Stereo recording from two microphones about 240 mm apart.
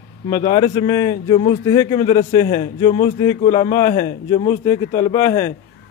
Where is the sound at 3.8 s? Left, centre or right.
Left; by 5.5 s centre.